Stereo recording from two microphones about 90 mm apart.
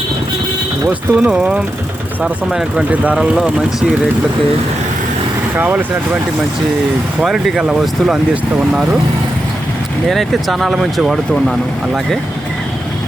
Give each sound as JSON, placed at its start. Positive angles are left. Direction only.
{"t": 1.2, "sound": "speech", "side_deg": -10}
{"t": 2.9, "sound": "speech", "side_deg": -15}
{"t": 5.5, "sound": "speech", "side_deg": -15}
{"t": 7.2, "sound": "speech", "side_deg": -5}
{"t": 10.1, "sound": "speech", "side_deg": 0}